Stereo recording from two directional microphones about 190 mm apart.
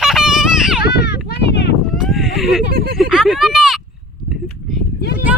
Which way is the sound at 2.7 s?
55° right (ahead or behind).